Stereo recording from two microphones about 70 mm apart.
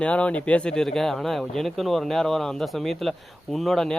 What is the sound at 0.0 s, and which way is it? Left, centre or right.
Speech, centre.